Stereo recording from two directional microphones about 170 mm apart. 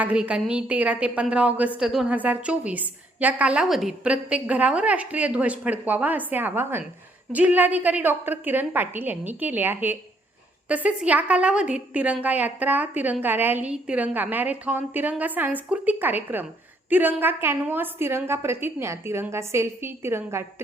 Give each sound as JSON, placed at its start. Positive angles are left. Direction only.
{"t": 0.0, "sound": "a woman's voice", "side_deg": -5}